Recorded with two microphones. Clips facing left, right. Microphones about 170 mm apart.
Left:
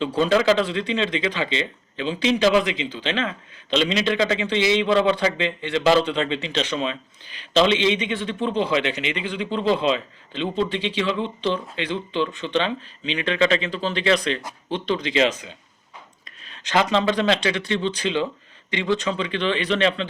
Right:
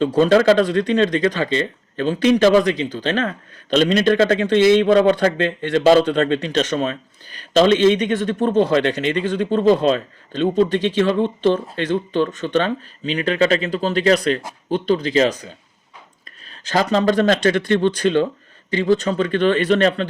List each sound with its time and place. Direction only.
0.0 s speech: 50° right (ahead or behind)
18.7 s speech: 40° right (ahead or behind)